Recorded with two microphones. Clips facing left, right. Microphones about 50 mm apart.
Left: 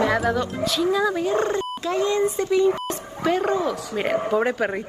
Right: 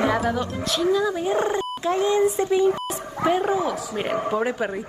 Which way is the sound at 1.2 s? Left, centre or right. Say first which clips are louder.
Even; centre.